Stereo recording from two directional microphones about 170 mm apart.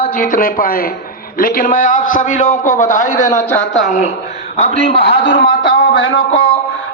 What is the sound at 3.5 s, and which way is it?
Speech, 5° left (ahead or behind).